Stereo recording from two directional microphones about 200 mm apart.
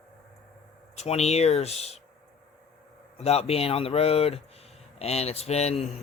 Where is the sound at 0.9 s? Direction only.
35° left (ahead or behind).